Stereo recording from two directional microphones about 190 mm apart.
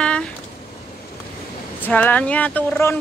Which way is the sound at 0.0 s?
5° left (ahead or behind).